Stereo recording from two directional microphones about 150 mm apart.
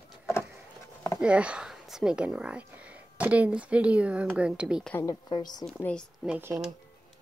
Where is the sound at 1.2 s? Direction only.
10° right (ahead or behind).